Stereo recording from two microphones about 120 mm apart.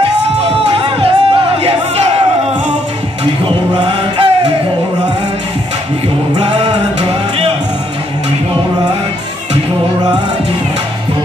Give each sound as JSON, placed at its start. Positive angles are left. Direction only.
{"t": 0.7, "sound": "a sound", "side_deg": -50}
{"t": 3.4, "sound": "chant", "side_deg": -45}
{"t": 6.4, "sound": "music", "side_deg": -55}